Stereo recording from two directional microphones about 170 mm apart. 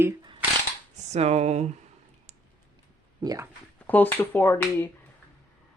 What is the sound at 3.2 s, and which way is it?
Speech, 20° right (ahead or behind).